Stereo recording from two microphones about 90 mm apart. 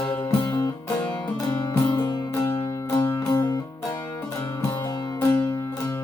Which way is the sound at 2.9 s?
40° left (ahead or behind).